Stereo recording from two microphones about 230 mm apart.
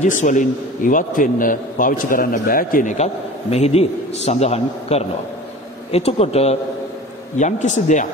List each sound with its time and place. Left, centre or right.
0.0 s a man's voice: left